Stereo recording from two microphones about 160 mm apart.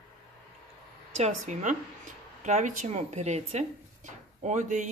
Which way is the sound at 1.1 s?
45° right (ahead or behind).